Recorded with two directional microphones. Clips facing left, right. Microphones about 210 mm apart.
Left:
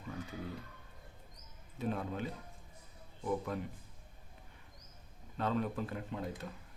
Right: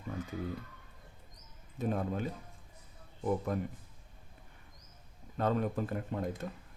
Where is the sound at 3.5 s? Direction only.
45° right (ahead or behind).